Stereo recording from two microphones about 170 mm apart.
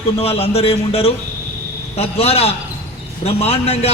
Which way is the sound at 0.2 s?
35° left (ahead or behind).